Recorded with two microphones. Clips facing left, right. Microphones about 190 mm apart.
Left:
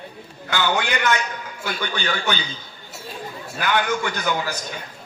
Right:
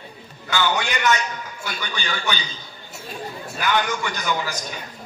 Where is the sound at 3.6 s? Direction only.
55° left (ahead or behind).